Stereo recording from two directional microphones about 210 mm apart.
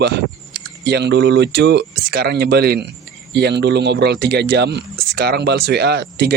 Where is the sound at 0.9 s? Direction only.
55° right (ahead or behind).